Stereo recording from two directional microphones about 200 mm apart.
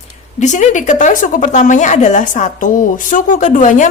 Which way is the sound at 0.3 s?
35° left (ahead or behind).